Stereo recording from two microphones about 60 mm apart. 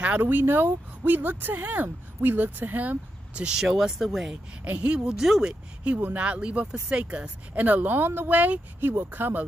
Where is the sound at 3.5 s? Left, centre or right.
Centre.